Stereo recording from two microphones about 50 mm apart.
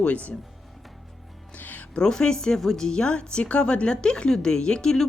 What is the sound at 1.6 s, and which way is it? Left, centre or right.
Music, left.